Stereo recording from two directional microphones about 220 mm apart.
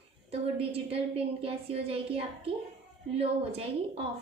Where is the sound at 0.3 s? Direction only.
25° right (ahead or behind).